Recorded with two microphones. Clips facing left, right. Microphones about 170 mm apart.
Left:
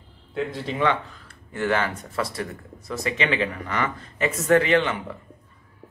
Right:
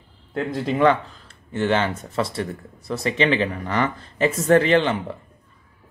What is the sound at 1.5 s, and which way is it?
Speech, 25° right (ahead or behind).